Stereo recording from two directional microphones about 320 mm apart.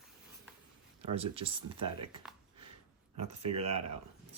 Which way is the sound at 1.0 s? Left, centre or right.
Centre.